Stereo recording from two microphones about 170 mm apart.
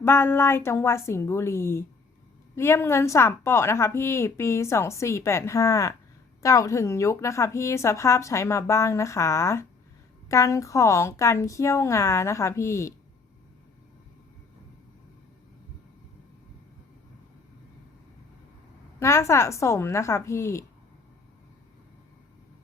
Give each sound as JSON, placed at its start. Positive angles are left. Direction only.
{"t": 0.0, "sound": "speech", "side_deg": 15}
{"t": 18.9, "sound": "speech", "side_deg": 15}